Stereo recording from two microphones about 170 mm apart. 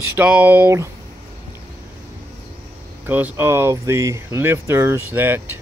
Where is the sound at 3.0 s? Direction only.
10° right (ahead or behind).